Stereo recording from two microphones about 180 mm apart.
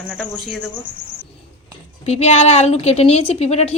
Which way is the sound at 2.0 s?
35° left (ahead or behind).